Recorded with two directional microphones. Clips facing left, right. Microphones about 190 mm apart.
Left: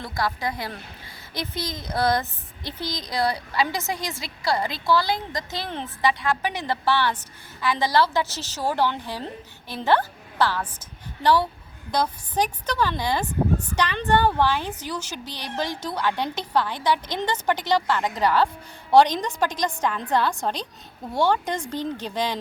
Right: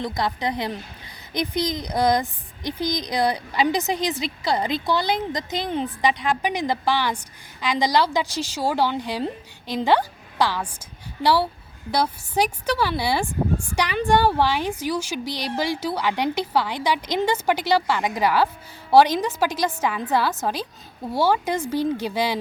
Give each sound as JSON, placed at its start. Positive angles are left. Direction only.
{"t": 0.0, "sound": "a woman's voice", "side_deg": -20}